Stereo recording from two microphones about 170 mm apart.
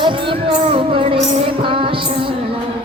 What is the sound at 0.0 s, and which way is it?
Music, 30° right (ahead or behind).